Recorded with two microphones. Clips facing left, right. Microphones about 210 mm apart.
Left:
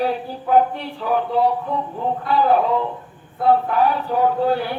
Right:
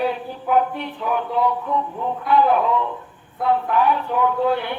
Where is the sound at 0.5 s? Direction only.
35° left (ahead or behind).